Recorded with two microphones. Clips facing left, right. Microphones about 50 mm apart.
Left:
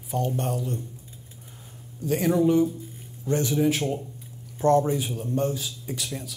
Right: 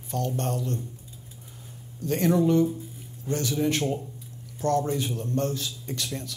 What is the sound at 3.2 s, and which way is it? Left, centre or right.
Speech, left.